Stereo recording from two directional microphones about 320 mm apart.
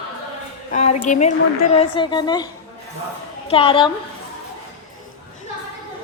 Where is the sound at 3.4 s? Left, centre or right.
Centre.